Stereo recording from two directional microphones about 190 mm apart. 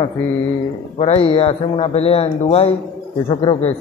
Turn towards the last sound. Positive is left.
turn(degrees=30)  # may be behind; listen again after turning